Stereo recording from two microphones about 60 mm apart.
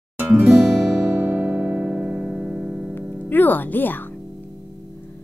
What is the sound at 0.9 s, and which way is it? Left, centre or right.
Music, right.